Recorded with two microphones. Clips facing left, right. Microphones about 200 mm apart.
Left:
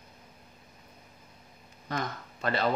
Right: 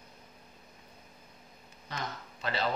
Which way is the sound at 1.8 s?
50° left (ahead or behind).